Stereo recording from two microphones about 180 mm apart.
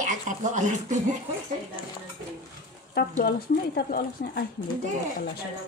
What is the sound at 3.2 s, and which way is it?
Speech, 55° left (ahead or behind).